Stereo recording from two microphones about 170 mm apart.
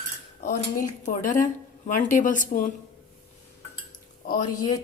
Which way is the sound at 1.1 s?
50° left (ahead or behind).